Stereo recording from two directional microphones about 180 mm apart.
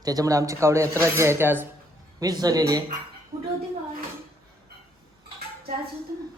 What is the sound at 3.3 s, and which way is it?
Speech, 35° right (ahead or behind).